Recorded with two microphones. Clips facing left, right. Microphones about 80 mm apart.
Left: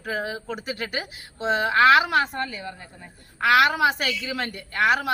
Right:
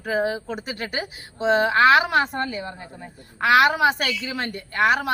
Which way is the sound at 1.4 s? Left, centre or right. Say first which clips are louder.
Right 2 dB; right.